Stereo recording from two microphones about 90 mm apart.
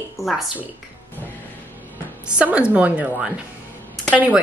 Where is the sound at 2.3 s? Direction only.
15° right (ahead or behind).